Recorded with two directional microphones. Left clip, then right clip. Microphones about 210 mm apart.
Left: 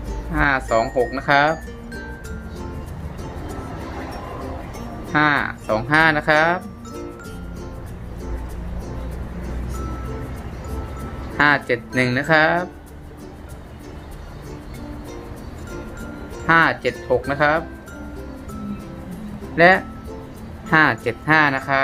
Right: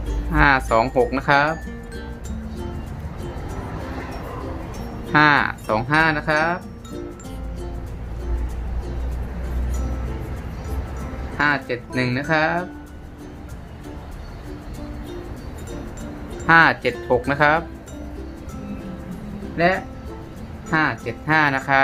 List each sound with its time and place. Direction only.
0.3 s speech: 10° right (ahead or behind)
5.1 s speech: 5° right (ahead or behind)
5.9 s speech: 5° left (ahead or behind)
11.3 s speech: 10° left (ahead or behind)
16.5 s speech: centre (ahead or behind)
19.5 s speech: 15° left (ahead or behind); by 21.8 s centre (ahead or behind)